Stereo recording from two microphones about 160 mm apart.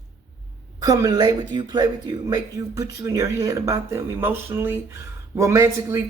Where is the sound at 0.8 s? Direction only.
25° right (ahead or behind).